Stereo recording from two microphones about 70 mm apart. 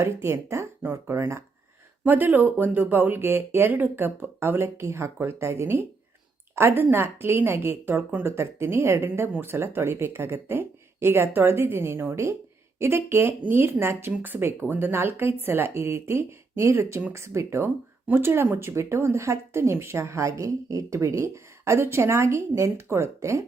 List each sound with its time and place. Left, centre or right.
0.0 s a woman's voice: right